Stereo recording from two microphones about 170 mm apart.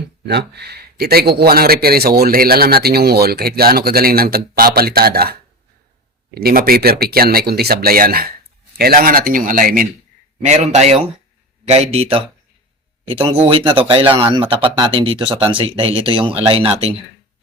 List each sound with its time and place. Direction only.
0.3 s speech: 75° right (ahead or behind); by 9.8 s 55° right (ahead or behind)
10.4 s speech: 40° right (ahead or behind)